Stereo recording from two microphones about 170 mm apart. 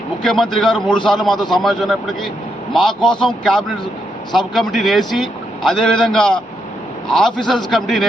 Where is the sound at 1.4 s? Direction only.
25° left (ahead or behind).